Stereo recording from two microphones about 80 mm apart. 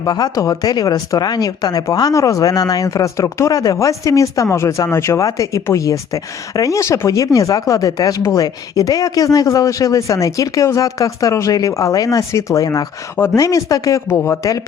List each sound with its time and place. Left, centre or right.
0.0 s speech: left